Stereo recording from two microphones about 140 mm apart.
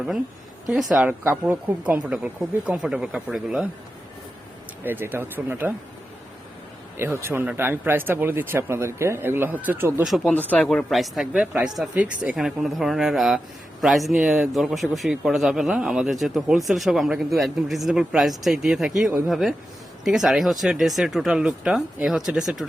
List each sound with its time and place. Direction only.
0.7 s a man's voice: 5° right (ahead or behind)
1.0 s speech: 15° right (ahead or behind)
4.8 s speech: 15° right (ahead or behind)
6.9 s speech: 20° right (ahead or behind)
10.1 s a man's voice: 5° left (ahead or behind)